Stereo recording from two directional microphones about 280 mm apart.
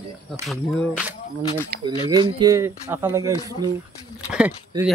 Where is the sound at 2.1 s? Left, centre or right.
Centre.